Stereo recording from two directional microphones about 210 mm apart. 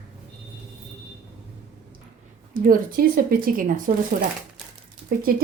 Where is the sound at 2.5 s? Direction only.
45° right (ahead or behind).